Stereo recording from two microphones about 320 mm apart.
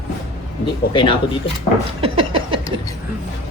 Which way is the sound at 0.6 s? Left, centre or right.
Centre.